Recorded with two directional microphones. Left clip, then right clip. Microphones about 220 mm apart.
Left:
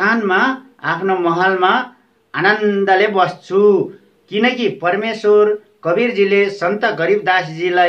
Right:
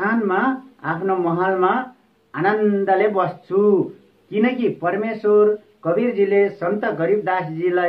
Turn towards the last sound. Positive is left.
turn(degrees=25)  # may be behind; listen again after turning